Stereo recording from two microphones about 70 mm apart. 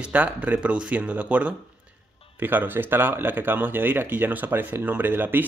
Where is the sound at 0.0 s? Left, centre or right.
Right.